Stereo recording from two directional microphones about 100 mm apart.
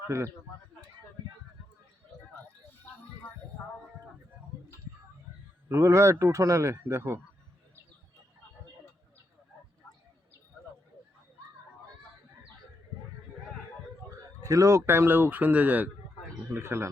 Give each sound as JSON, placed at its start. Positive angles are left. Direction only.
{"t": 0.1, "sound": "a man's voice", "side_deg": -30}
{"t": 5.6, "sound": "a man's voice", "side_deg": -30}
{"t": 14.4, "sound": "a man's voice", "side_deg": -35}